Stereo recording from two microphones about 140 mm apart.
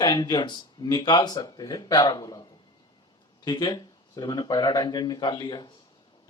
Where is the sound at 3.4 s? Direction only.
30° left (ahead or behind).